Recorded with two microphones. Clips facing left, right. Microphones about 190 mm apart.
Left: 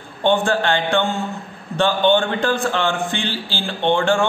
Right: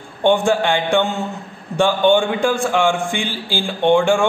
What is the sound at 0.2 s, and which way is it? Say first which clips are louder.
A man's voice: right 2 dB; 15° right (ahead or behind).